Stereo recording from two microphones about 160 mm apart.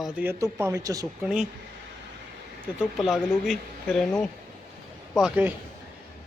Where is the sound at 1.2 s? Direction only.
5° right (ahead or behind).